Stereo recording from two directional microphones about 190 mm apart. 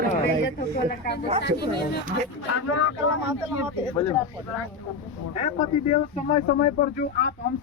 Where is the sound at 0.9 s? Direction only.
60° left (ahead or behind).